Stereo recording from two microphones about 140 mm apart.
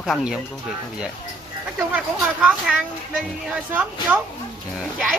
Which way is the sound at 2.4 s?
5° right (ahead or behind).